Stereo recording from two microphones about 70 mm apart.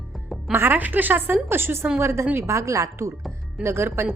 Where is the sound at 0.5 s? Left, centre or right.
Right.